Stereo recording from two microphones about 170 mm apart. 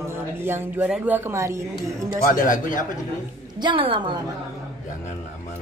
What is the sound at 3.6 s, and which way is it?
Speech, 30° right (ahead or behind).